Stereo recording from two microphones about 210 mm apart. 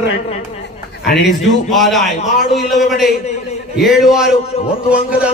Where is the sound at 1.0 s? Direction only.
50° left (ahead or behind).